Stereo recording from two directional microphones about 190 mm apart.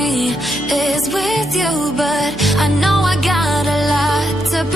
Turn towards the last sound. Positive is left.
turn(degrees=0)  # may be behind; listen again after turning